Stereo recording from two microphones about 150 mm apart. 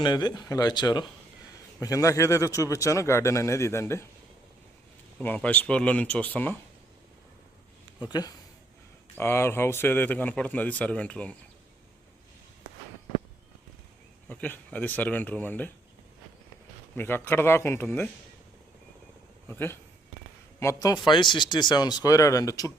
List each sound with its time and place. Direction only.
0.0 s a man's voice: 30° left (ahead or behind)
5.2 s speech: 10° left (ahead or behind)
8.1 s a man's voice: 25° left (ahead or behind); by 11.3 s 5° left (ahead or behind)
14.3 s speech: 10° left (ahead or behind)
16.9 s speech: 15° left (ahead or behind)
19.5 s a man's voice: 15° left (ahead or behind)